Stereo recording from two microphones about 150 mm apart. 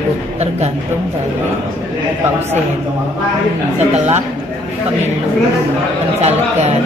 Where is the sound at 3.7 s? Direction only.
45° right (ahead or behind).